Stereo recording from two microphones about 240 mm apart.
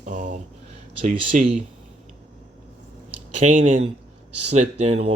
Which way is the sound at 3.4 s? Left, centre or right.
Right.